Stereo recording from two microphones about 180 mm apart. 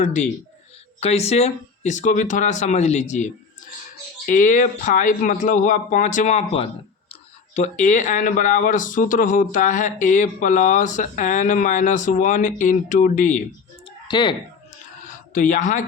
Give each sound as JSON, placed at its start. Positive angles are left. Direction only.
{"t": 0.0, "sound": "speech", "side_deg": 40}
{"t": 14.1, "sound": "speech", "side_deg": 25}
{"t": 15.0, "sound": "a sound", "side_deg": 45}